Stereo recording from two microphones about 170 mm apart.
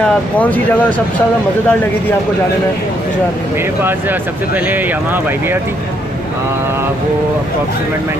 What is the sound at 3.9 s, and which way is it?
Speech, 10° right (ahead or behind).